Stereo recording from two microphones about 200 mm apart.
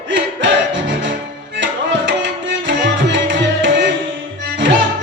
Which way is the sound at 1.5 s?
60° right (ahead or behind).